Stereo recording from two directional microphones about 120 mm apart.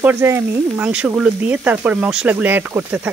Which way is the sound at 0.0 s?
20° right (ahead or behind).